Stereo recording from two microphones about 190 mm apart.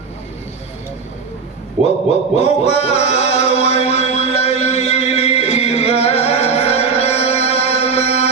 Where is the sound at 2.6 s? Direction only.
35° left (ahead or behind).